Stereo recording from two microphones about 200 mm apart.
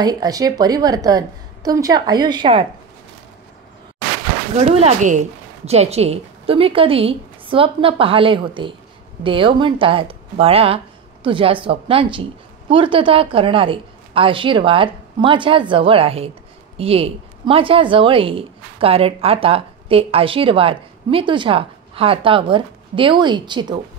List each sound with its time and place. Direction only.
0.0 s a woman's voice: 20° right (ahead or behind)
4.6 s a woman's voice: 30° right (ahead or behind)